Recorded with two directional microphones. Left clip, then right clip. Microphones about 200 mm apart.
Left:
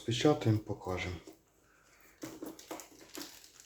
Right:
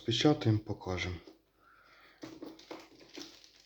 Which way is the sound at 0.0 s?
15° right (ahead or behind).